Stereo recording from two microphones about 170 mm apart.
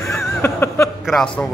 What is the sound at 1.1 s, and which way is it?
Speech, 5° left (ahead or behind).